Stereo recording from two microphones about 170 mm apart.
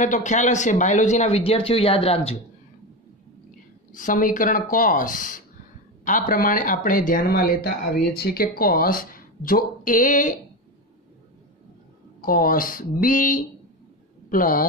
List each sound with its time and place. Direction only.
0.0 s speech: 45° left (ahead or behind)
3.9 s speech: 50° left (ahead or behind)
12.2 s speech: 55° left (ahead or behind)